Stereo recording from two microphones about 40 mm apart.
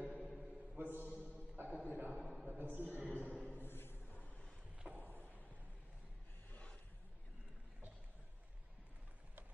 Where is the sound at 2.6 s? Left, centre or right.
Right.